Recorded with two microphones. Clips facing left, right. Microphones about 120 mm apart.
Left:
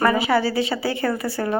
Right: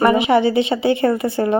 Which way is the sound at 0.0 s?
20° right (ahead or behind).